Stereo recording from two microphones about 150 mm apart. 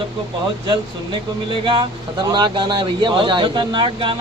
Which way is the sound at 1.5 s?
35° right (ahead or behind).